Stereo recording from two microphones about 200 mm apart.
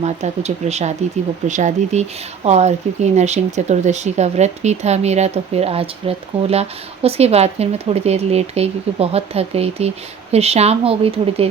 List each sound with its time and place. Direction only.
0.0 s speech: 35° right (ahead or behind)